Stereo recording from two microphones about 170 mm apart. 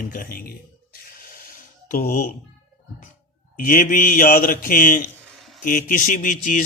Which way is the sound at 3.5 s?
50° left (ahead or behind).